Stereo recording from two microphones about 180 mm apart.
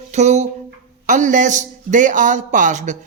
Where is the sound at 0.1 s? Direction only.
40° right (ahead or behind).